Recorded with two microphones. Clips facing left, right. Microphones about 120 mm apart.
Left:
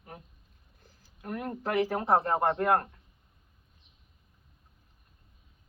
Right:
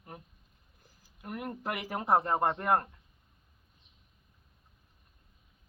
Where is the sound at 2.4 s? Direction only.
5° right (ahead or behind).